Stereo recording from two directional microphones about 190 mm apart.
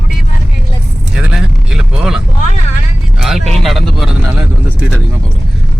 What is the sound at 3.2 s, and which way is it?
Music, centre (ahead or behind).